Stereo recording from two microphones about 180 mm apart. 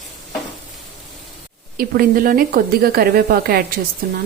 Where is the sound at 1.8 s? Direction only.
55° right (ahead or behind).